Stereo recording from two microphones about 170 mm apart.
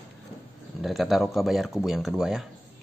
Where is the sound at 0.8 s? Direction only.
Centre (ahead or behind).